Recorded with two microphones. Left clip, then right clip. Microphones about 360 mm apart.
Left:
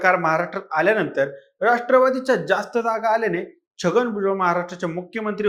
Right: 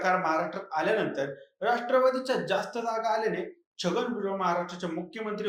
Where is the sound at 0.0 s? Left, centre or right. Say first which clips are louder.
Left 8 dB; left.